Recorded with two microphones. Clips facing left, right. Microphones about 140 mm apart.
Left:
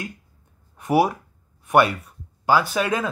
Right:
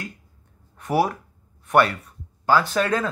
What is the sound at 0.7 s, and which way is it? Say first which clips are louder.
Speech: left 2 dB; 15° left (ahead or behind).